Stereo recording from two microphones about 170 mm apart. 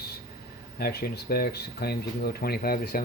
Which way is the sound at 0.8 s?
65° left (ahead or behind).